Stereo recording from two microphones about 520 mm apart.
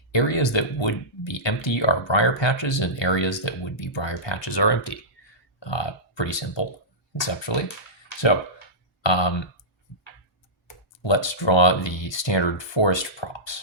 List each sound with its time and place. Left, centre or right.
0.1 s speech: left
9.0 s speech: left
11.0 s speech: left